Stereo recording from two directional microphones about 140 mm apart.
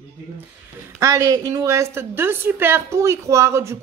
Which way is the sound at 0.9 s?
25° right (ahead or behind).